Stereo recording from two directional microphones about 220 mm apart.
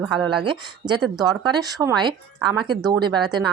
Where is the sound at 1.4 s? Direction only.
20° right (ahead or behind).